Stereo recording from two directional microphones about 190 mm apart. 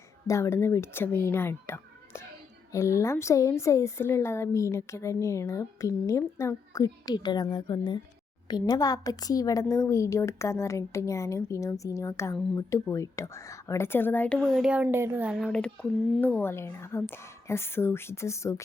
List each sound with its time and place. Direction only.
0.3 s a woman's voice: 15° left (ahead or behind)